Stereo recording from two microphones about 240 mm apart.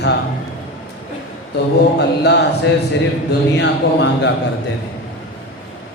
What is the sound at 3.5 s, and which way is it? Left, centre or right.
Speech, left.